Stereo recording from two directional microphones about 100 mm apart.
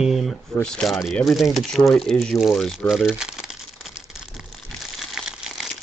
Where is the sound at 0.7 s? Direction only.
5° left (ahead or behind).